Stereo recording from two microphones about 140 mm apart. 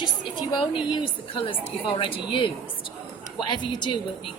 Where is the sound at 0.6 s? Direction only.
35° left (ahead or behind).